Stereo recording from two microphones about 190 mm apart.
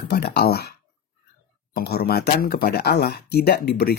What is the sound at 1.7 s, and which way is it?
Speech, 55° left (ahead or behind).